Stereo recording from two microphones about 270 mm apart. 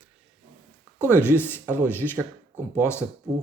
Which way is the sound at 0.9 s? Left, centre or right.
Centre.